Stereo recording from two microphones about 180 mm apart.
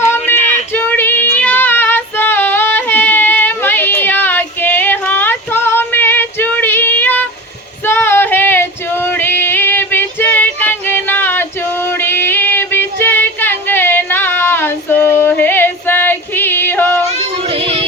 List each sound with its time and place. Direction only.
0.7 s female singing: 10° left (ahead or behind)
17.4 s child singing: 30° right (ahead or behind)